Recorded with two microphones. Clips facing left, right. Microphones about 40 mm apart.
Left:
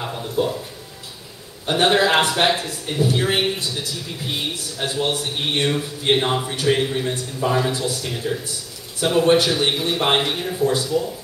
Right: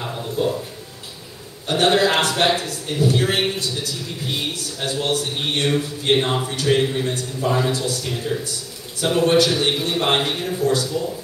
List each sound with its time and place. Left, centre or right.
0.0 s a sound: centre
1.7 s a man's voice: centre
6.8 s a man's voice: centre
10.7 s a man's voice: centre